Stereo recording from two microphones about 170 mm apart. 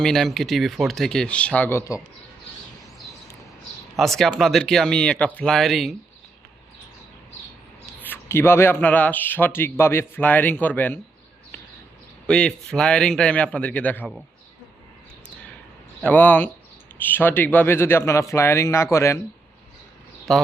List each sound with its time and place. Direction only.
0.0 s a man's voice: centre (ahead or behind)
3.9 s a man's voice: centre (ahead or behind)
8.0 s speech: 15° left (ahead or behind)
12.2 s a man's voice: 5° left (ahead or behind)
16.0 s speech: 10° left (ahead or behind)
20.3 s a man's voice: centre (ahead or behind)